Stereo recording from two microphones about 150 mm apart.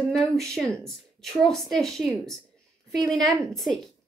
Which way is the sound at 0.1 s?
Centre (ahead or behind).